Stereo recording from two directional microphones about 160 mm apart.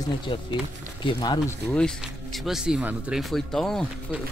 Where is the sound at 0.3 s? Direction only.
30° left (ahead or behind).